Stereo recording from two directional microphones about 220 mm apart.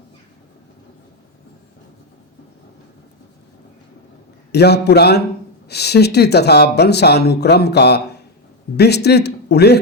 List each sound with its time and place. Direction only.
4.5 s speech: 50° left (ahead or behind)